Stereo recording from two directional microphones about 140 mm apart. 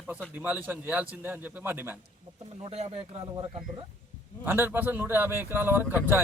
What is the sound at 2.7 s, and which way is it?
Speech, 50° right (ahead or behind).